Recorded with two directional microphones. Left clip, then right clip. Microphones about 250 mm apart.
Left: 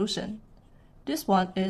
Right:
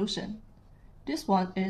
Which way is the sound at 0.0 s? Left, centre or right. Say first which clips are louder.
Left 3 dB; left.